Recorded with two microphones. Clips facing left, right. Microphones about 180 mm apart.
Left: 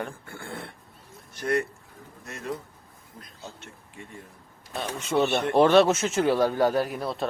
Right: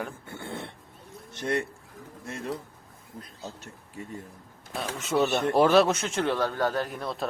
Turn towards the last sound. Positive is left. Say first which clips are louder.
# left 4 dB
turn(degrees=5)  # may be behind; listen again after turning